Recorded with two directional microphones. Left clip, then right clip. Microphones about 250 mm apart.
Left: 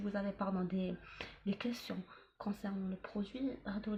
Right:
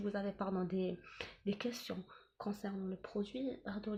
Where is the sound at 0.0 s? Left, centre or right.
Right.